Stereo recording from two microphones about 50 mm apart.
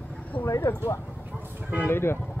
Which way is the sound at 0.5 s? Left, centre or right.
Left.